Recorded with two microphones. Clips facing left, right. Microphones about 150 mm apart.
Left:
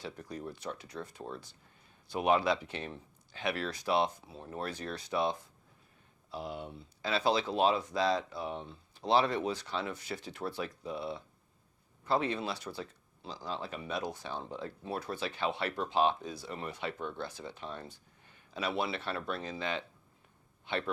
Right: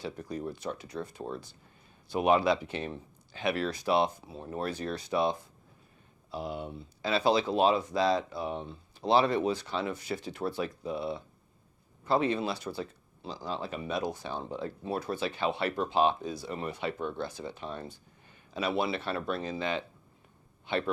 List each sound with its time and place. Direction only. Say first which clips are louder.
0.2 s speech: right 5 dB; 20° right (ahead or behind)
1.2 s speech: right 5 dB; 30° right (ahead or behind)
2.0 s speech: right 3 dB; 10° right (ahead or behind)
4.4 s speech: right 5 dB; 25° right (ahead or behind)
4.6 s speech: right 5 dB; 10° right (ahead or behind)